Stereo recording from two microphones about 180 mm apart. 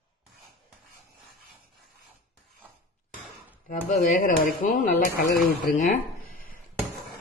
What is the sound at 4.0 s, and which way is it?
Speech, 45° left (ahead or behind).